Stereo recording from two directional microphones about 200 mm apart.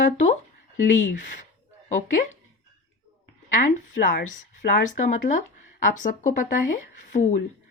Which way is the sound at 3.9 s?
45° left (ahead or behind).